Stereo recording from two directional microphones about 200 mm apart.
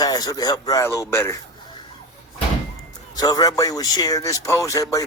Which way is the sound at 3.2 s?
20° left (ahead or behind).